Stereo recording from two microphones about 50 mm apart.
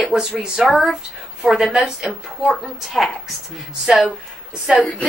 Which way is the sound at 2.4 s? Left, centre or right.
Centre.